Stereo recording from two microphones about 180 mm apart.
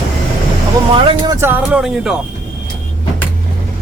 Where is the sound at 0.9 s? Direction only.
30° right (ahead or behind).